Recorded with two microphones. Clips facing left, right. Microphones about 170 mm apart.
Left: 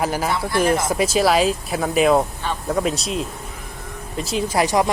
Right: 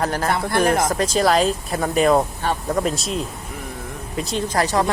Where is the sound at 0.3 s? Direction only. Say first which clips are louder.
Right 1 dB; 55° right (ahead or behind).